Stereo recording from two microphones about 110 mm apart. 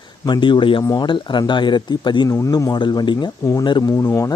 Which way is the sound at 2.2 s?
30° left (ahead or behind).